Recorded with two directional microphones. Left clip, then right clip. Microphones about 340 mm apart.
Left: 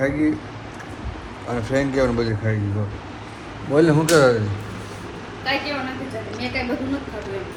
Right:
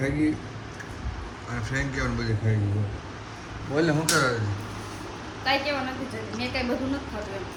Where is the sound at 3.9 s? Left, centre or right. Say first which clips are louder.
Left 8 dB; left.